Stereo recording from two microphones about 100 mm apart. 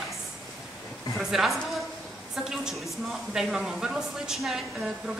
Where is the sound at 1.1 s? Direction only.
Centre (ahead or behind).